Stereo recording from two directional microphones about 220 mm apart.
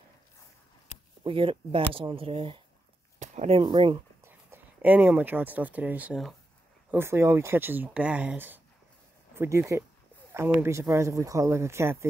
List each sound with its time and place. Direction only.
1.2 s speech: 25° right (ahead or behind)
4.2 s speech: 10° right (ahead or behind)